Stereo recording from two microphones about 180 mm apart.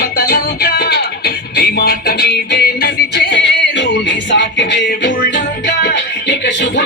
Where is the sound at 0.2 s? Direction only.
55° left (ahead or behind).